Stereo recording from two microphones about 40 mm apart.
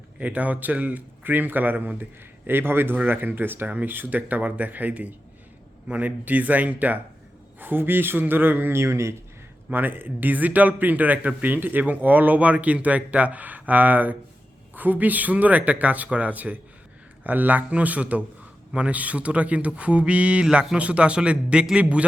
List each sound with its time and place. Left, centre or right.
0.2 s speech: right
1.2 s speech: right
2.5 s a man's voice: right
7.6 s a man's voice: right
9.7 s speech: right